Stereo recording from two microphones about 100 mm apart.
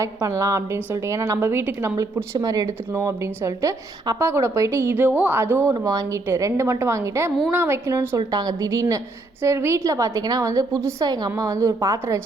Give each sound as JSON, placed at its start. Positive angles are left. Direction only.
{"t": 0.0, "sound": "a woman's voice", "side_deg": -30}
{"t": 5.7, "sound": "a woman's voice", "side_deg": -40}
{"t": 8.3, "sound": "a woman's voice", "side_deg": -40}